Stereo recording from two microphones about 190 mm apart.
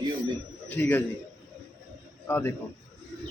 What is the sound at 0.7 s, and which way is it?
Speech, 10° left (ahead or behind).